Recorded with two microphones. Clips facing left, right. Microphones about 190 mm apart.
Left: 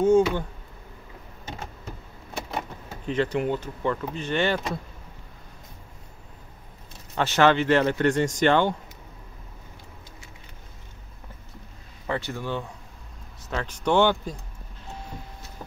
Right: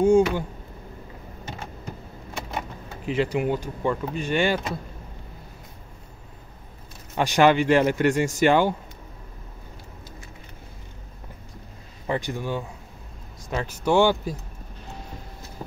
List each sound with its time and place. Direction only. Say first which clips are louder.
0.0 s speech: right 1 dB; 10° right (ahead or behind)
3.1 s speech: right 1 dB; 10° right (ahead or behind)
7.2 s speech: right 2 dB; 15° right (ahead or behind)
12.1 s speech: right 2 dB; 15° right (ahead or behind)